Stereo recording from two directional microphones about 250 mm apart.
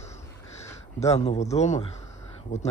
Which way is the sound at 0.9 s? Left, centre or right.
Left.